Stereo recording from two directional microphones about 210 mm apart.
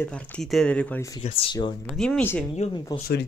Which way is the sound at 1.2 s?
25° left (ahead or behind).